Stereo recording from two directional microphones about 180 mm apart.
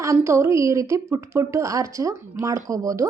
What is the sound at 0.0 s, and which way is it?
A woman's voice, 15° right (ahead or behind).